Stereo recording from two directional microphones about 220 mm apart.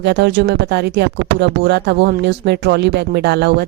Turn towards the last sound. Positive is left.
turn(degrees=-50)  # may be behind; listen again after turning